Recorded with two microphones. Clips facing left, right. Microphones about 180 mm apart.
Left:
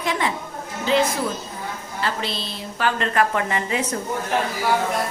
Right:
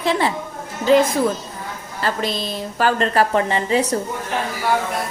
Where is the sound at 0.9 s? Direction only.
40° right (ahead or behind).